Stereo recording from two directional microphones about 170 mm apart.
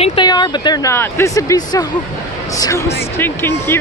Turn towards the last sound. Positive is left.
turn(degrees=15)  # may be behind; listen again after turning